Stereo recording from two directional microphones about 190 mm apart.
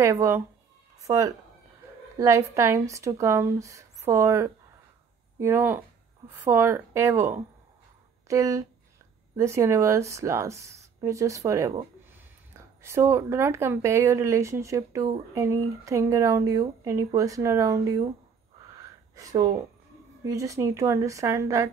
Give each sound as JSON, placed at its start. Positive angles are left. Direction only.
{"t": 0.0, "sound": "speech", "side_deg": -15}
{"t": 18.8, "sound": "a sound", "side_deg": -20}
{"t": 20.2, "sound": "speech", "side_deg": -15}